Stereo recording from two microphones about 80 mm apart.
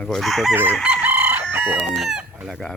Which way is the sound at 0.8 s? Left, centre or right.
Centre.